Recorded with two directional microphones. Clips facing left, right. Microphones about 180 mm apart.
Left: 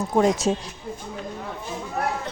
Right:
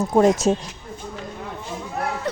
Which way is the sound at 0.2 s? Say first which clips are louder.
Right 3 dB; 45° right (ahead or behind).